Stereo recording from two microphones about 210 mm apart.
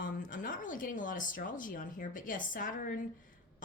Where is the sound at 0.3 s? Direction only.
40° left (ahead or behind).